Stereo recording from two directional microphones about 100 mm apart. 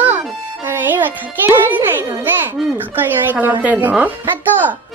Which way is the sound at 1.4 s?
20° right (ahead or behind).